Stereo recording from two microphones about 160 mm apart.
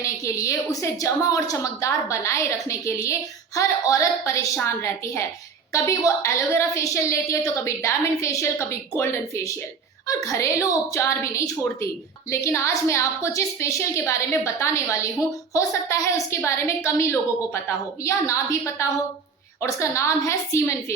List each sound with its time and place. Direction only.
0.0 s a woman's voice: 20° left (ahead or behind)